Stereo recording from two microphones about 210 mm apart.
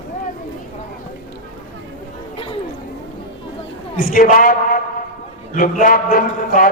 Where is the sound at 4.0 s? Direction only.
40° left (ahead or behind).